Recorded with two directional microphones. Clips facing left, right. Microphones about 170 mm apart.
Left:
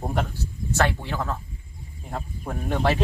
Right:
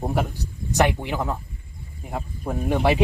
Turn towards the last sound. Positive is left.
turn(degrees=-15)  # may be behind; listen again after turning